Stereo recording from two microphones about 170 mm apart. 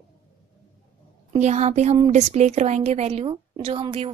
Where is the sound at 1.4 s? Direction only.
40° right (ahead or behind).